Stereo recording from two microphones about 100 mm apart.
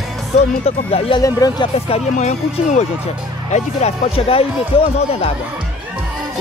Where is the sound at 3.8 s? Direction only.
85° left.